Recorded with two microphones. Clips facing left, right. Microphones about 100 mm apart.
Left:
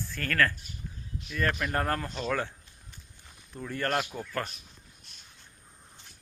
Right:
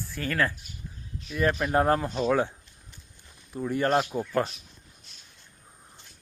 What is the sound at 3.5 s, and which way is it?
Speech, 15° right (ahead or behind).